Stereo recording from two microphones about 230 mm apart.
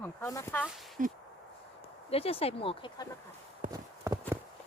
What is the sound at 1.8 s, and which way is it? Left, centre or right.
Speech, left.